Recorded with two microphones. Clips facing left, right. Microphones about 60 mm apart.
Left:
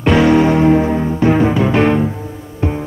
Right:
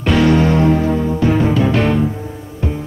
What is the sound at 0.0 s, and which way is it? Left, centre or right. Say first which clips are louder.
Music: left 2 dB; centre.